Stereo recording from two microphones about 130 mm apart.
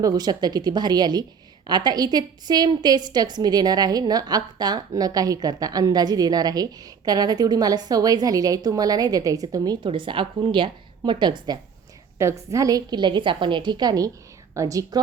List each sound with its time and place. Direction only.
0.0 s a woman's voice: 30° right (ahead or behind)
9.8 s a woman's voice: 40° right (ahead or behind)
12.2 s a woman's voice: 25° right (ahead or behind)